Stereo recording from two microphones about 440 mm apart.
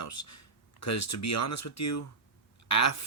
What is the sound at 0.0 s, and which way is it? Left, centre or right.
Speech, left.